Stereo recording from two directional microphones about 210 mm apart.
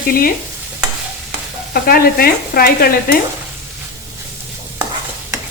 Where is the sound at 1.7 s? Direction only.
45° left (ahead or behind).